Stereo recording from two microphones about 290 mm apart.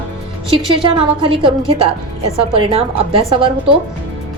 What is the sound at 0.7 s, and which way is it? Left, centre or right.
A woman's voice, centre.